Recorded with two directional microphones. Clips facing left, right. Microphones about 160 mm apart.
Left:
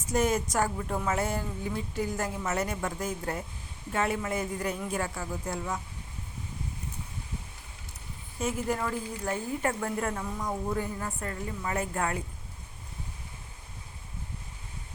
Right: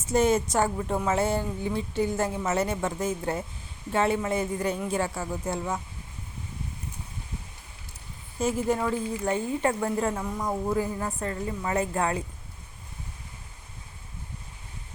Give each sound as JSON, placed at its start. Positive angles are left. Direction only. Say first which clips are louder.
{"t": 0.1, "sound": "speech", "louder": "right 4 dB", "side_deg": -25}
{"t": 8.4, "sound": "speech", "louder": "right 4 dB", "side_deg": -30}
{"t": 10.2, "sound": "speech", "louder": "right 4 dB", "side_deg": -15}
{"t": 11.0, "sound": "speech", "louder": "right 5 dB", "side_deg": -30}